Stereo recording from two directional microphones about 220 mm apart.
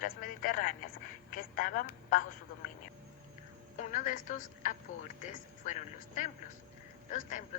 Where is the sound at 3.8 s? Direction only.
35° left (ahead or behind).